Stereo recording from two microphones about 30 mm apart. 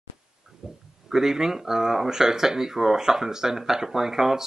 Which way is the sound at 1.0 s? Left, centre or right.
Centre.